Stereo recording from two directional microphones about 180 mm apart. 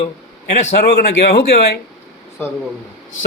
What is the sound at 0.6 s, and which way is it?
Speech, 60° left (ahead or behind).